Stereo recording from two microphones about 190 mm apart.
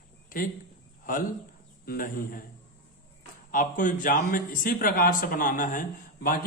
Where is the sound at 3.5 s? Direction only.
45° left (ahead or behind).